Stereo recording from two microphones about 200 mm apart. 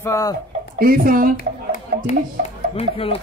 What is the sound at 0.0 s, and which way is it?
Speech, 15° left (ahead or behind).